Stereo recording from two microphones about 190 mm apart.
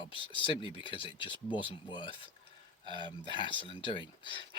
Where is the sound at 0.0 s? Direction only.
25° left (ahead or behind).